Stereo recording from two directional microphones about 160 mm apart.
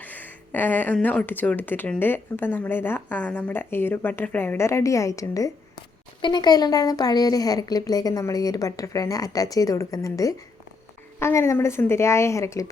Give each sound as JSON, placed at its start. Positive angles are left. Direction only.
{"t": 0.0, "sound": "speech", "side_deg": 10}